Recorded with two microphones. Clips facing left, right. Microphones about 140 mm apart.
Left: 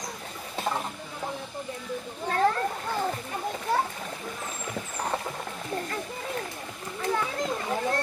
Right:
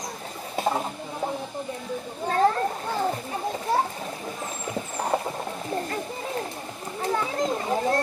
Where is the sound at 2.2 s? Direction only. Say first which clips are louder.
Right 3 dB; 30° right (ahead or behind).